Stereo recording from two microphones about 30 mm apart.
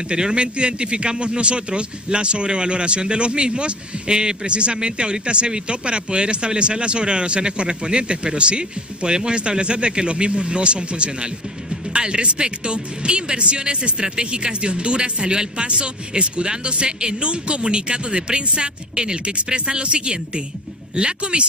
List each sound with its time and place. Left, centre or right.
0.1 s speech: right